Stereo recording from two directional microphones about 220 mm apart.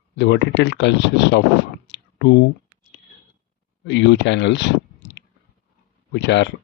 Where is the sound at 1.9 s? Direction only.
50° left (ahead or behind).